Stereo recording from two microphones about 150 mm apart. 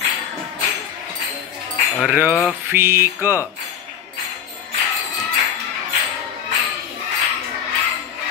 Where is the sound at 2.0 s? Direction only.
10° right (ahead or behind).